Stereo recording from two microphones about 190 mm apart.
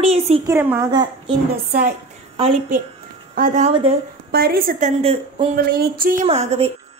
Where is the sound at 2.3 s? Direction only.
30° right (ahead or behind).